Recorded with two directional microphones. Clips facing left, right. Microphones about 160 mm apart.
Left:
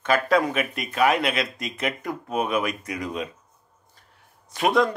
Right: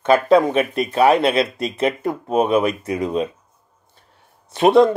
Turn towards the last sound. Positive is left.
turn(degrees=-25)  # may be behind; listen again after turning